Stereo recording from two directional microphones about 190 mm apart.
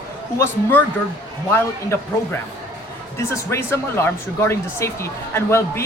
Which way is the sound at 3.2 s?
15° left (ahead or behind).